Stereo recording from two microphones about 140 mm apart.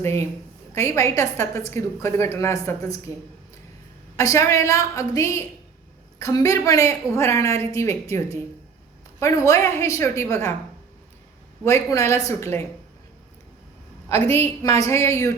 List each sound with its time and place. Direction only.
0.0 s a woman's voice: 20° left (ahead or behind)
4.2 s a woman's voice: 20° left (ahead or behind)
9.2 s a woman's voice: 20° left (ahead or behind)
11.6 s a woman's voice: 20° left (ahead or behind)
14.1 s a woman's voice: 45° right (ahead or behind)
14.3 s a woman's voice: 20° left (ahead or behind)